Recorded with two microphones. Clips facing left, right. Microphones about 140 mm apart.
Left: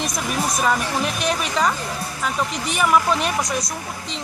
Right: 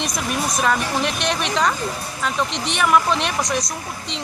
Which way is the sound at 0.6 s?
5° left (ahead or behind).